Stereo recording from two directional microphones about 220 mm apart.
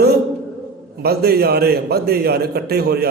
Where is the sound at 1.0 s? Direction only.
45° right (ahead or behind).